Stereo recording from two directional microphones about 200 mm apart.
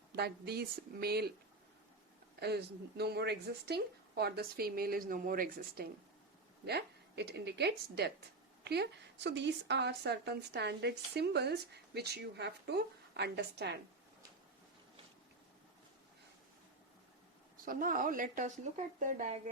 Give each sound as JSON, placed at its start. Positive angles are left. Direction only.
{"t": 0.2, "sound": "speech", "side_deg": -55}
{"t": 2.4, "sound": "speech", "side_deg": -55}
{"t": 17.7, "sound": "speech", "side_deg": -45}